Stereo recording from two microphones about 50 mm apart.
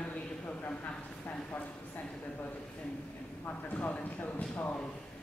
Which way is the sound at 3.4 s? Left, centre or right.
Left.